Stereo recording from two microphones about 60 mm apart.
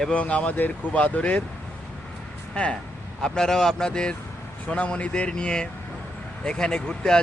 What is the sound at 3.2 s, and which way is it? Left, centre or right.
Speech, centre.